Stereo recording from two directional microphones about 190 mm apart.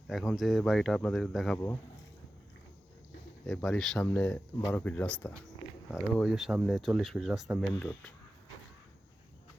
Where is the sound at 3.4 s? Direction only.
Centre (ahead or behind).